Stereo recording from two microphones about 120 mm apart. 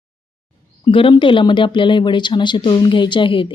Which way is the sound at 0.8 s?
45° left (ahead or behind).